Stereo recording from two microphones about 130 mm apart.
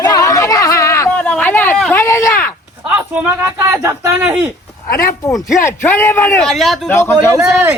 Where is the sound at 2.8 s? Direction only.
10° right (ahead or behind).